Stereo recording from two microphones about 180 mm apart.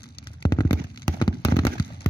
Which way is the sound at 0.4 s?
20° left (ahead or behind).